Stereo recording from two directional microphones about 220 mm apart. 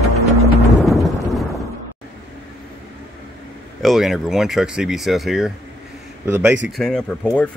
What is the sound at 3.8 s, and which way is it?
Speech, centre (ahead or behind).